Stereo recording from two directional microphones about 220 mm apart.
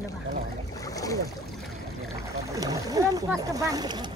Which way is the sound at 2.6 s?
15° right (ahead or behind).